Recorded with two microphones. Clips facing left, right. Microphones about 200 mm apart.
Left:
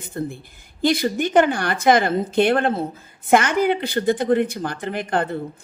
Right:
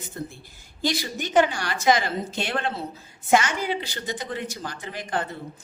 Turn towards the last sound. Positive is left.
turn(degrees=55)  # may be behind; listen again after turning